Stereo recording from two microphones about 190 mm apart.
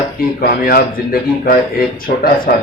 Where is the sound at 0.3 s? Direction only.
55° left (ahead or behind).